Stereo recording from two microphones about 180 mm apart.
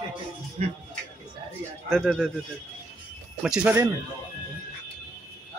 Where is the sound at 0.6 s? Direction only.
40° right (ahead or behind).